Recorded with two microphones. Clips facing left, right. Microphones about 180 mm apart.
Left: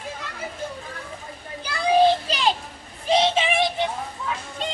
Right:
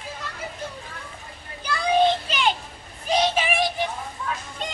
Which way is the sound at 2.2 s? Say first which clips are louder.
Left 1 dB; 35° left (ahead or behind).